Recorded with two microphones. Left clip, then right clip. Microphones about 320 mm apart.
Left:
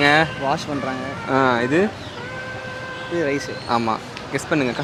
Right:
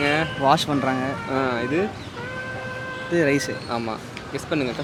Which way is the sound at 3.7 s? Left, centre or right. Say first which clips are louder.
Left 7 dB; centre.